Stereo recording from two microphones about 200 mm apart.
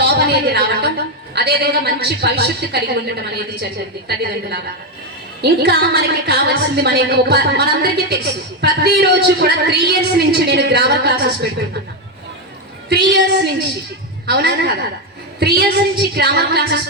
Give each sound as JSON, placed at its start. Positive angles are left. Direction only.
{"t": 0.0, "sound": "a woman's voice", "side_deg": -55}
{"t": 12.9, "sound": "a woman's voice", "side_deg": -55}